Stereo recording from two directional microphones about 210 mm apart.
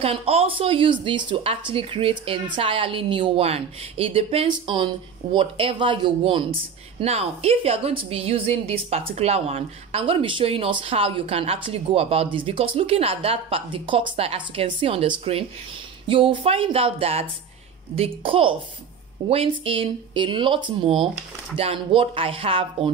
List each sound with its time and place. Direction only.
0.0 s a woman's voice: 25° right (ahead or behind)